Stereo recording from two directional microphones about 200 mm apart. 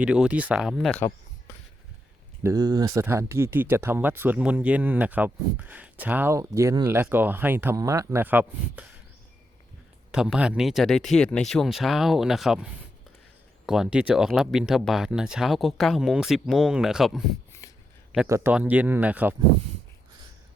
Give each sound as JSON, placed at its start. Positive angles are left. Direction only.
{"t": 0.0, "sound": "speech", "side_deg": -5}
{"t": 2.4, "sound": "speech", "side_deg": -15}
{"t": 10.1, "sound": "speech", "side_deg": -5}
{"t": 17.6, "sound": "a sound", "side_deg": 20}
{"t": 18.3, "sound": "speech", "side_deg": -15}